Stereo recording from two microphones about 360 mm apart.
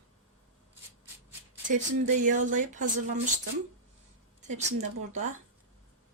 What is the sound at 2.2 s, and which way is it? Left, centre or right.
Speech, right.